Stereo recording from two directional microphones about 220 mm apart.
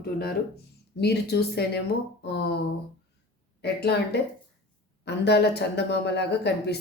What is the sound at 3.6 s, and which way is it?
Speech, 50° left (ahead or behind).